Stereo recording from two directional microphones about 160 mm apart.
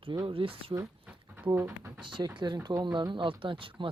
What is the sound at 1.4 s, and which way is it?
Speech, 15° right (ahead or behind).